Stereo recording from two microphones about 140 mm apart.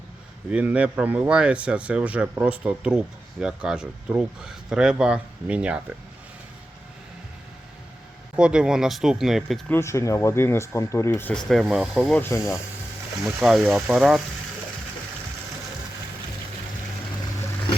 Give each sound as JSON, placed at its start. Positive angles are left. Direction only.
{"t": 0.5, "sound": "speech", "side_deg": -10}
{"t": 8.4, "sound": "speech", "side_deg": -5}
{"t": 9.6, "sound": "speech", "side_deg": 20}
{"t": 11.3, "sound": "speech", "side_deg": 0}
{"t": 12.1, "sound": "speech", "side_deg": 15}
{"t": 13.2, "sound": "speech", "side_deg": 0}